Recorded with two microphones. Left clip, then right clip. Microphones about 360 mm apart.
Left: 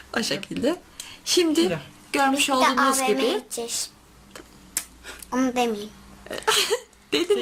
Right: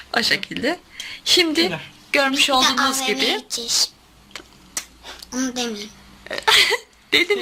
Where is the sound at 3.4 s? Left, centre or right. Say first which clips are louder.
Right 2 dB; left.